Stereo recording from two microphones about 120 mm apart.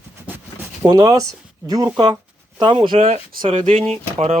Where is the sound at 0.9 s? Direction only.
30° right (ahead or behind).